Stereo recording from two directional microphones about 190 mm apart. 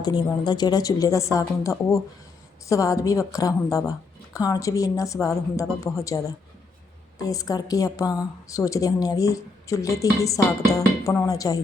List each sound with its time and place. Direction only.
0.0 s a woman's voice: 25° left (ahead or behind)